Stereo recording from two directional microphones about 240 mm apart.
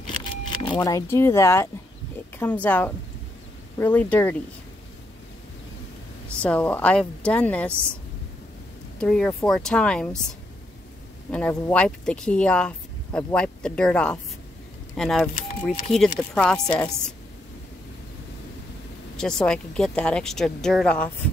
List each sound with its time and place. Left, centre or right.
0.2 s a sound: centre
0.7 s speech: centre
6.4 s speech: centre
9.0 s speech: centre
11.5 s speech: centre
19.1 s speech: centre